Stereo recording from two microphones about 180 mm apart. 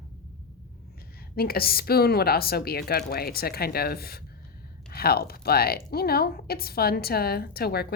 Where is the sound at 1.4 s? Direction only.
55° left (ahead or behind).